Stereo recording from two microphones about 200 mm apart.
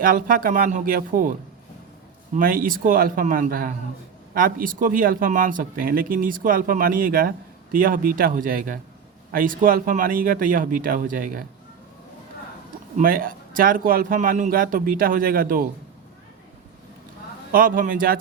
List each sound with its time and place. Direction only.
0.0 s speech: 45° right (ahead or behind)
2.3 s speech: 45° right (ahead or behind)
13.0 s speech: 45° right (ahead or behind)
17.5 s speech: 45° right (ahead or behind)